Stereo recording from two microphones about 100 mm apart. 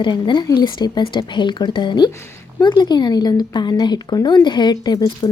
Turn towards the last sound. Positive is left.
turn(degrees=45)  # may be behind; listen again after turning